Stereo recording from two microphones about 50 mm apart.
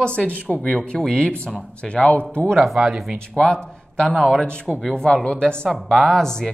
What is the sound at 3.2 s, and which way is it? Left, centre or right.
Speech, centre.